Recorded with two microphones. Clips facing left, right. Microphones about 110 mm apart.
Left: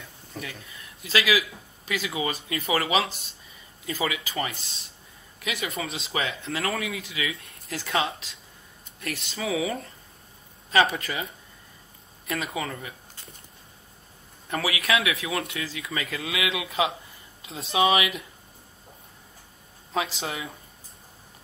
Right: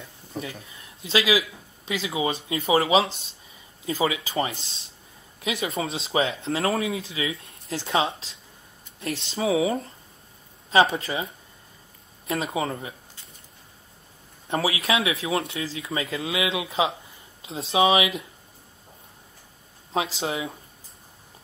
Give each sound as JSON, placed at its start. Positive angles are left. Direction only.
{"t": 0.3, "sound": "speech", "side_deg": -25}
{"t": 12.3, "sound": "speech", "side_deg": -30}
{"t": 14.5, "sound": "speech", "side_deg": -30}
{"t": 19.9, "sound": "speech", "side_deg": -35}